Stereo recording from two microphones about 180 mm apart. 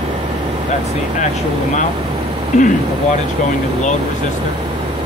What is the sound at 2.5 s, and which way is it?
Speech, 40° left (ahead or behind).